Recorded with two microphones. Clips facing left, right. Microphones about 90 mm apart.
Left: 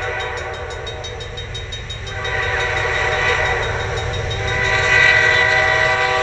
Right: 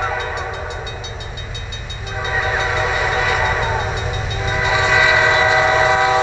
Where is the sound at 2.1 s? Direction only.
15° right (ahead or behind).